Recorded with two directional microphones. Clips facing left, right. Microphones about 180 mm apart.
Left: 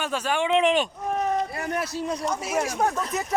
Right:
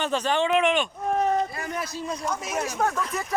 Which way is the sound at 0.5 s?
35° left (ahead or behind).